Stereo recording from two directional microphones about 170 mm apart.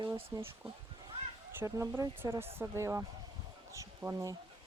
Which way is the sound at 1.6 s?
15° right (ahead or behind).